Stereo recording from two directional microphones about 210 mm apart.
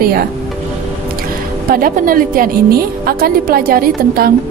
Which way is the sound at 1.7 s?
40° right (ahead or behind).